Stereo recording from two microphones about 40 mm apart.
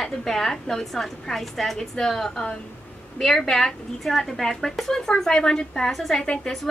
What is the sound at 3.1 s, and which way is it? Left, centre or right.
A woman's voice, centre.